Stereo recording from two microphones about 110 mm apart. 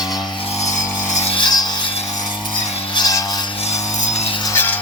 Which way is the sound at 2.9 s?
35° left (ahead or behind).